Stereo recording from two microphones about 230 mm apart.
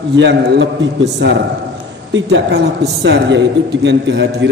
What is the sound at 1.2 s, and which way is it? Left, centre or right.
A man's voice, right.